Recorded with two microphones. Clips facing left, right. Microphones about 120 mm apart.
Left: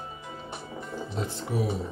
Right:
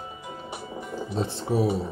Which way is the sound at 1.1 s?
30° right (ahead or behind).